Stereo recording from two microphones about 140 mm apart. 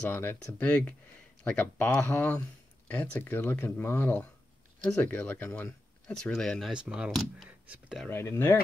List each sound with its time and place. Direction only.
0.1 s speech: 15° left (ahead or behind)
6.7 s speech: 5° right (ahead or behind)
7.6 s speech: 10° right (ahead or behind)
8.1 s speech: 15° left (ahead or behind)